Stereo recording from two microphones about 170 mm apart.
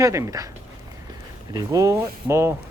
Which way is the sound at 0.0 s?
20° right (ahead or behind).